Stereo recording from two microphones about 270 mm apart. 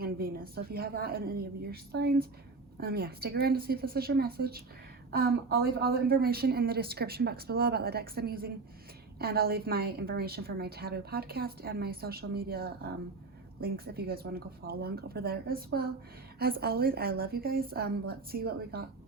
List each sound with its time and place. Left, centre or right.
0.0 s a woman's voice: right